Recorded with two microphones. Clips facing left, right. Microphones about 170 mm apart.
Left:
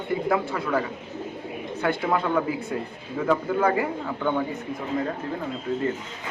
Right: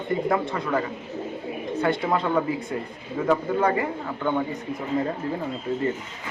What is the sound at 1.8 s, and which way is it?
Speech, centre (ahead or behind).